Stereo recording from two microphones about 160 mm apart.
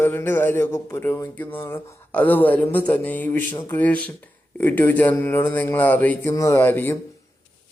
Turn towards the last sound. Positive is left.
turn(degrees=10)  # may be behind; listen again after turning